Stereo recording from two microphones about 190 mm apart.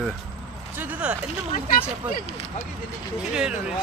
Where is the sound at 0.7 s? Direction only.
10° right (ahead or behind).